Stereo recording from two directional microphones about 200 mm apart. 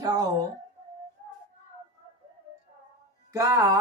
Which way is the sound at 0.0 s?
20° right (ahead or behind).